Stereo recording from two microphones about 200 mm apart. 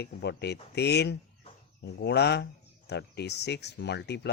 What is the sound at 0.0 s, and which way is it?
Speech, 55° left (ahead or behind).